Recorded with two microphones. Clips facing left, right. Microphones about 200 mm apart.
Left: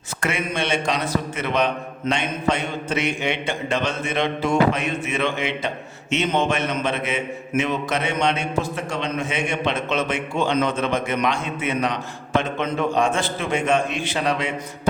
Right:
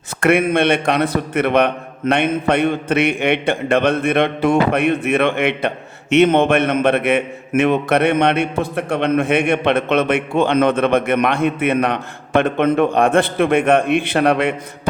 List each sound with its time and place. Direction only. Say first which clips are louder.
0.2 s a man's voice: right 11 dB; 55° right (ahead or behind)